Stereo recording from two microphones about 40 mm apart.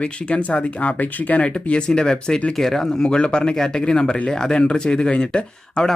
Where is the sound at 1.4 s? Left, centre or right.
Left.